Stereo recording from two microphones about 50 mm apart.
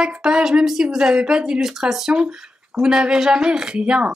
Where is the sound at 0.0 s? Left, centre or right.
Centre.